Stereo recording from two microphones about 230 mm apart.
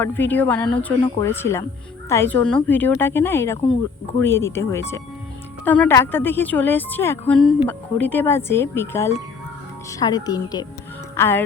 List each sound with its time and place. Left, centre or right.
0.0 s a woman's voice: centre